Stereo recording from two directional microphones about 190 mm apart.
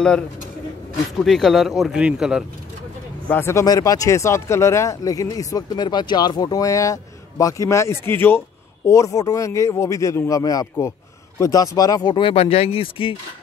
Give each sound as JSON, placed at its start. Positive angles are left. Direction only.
{"t": 1.2, "sound": "speech", "side_deg": 0}
{"t": 3.3, "sound": "speech", "side_deg": 10}